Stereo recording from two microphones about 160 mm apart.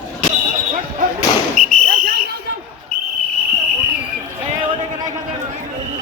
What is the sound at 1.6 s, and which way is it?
Basketball bounce, 55° right (ahead or behind).